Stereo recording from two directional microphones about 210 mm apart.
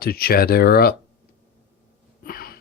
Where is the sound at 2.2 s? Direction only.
45° left (ahead or behind).